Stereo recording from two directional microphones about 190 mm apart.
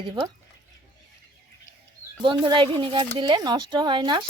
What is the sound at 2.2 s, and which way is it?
Speech, 25° right (ahead or behind).